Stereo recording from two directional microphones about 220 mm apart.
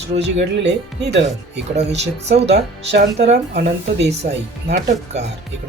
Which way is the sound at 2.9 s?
50° right (ahead or behind).